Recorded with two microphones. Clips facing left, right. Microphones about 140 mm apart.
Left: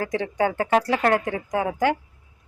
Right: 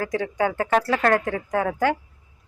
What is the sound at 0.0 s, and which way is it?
A woman's voice, 25° left (ahead or behind).